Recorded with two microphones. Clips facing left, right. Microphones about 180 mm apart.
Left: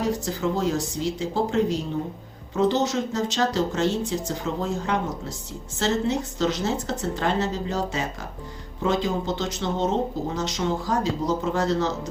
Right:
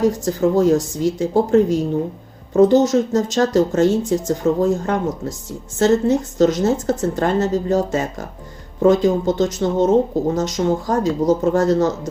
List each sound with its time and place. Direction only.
0.0 s speech: 45° right (ahead or behind)